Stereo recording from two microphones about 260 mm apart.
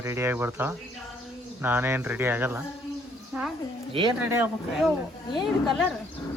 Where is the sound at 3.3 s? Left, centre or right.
Centre.